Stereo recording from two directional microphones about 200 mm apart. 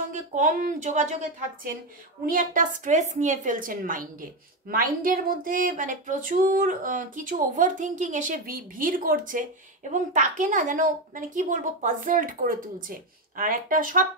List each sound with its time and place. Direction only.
0.1 s a woman's voice: 40° right (ahead or behind)